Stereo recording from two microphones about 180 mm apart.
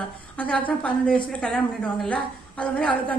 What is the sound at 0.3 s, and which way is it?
A woman's voice, 10° left (ahead or behind).